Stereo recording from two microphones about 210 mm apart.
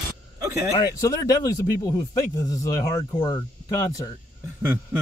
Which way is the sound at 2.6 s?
15° left (ahead or behind).